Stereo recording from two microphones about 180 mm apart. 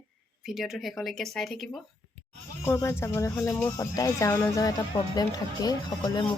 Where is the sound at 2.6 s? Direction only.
15° left (ahead or behind).